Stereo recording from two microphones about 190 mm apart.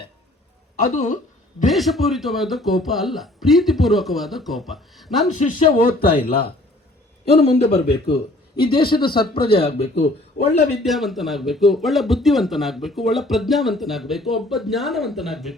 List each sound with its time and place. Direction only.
0.9 s a sound: 45° left (ahead or behind)
1.6 s speech: centre (ahead or behind)
5.3 s speech: 40° left (ahead or behind)
6.1 s a man's voice: 30° left (ahead or behind)
10.8 s speech: centre (ahead or behind)